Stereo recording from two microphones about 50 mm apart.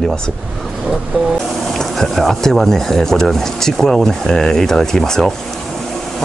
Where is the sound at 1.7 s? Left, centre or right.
Centre.